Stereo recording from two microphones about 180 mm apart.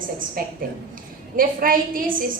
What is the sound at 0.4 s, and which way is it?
A woman's voice, 55° right (ahead or behind).